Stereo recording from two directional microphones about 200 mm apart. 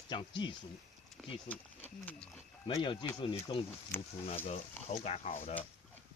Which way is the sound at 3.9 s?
10° left (ahead or behind).